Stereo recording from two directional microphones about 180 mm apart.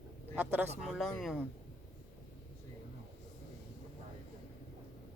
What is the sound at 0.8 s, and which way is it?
Speech, centre (ahead or behind).